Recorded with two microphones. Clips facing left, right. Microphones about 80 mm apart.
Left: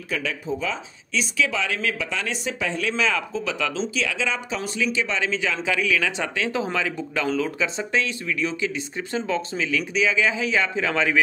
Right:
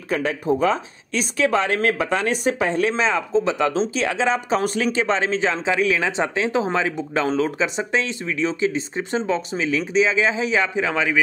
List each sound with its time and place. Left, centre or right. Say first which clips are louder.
0.1 s speech: right 7 dB; right; by 11.1 s centre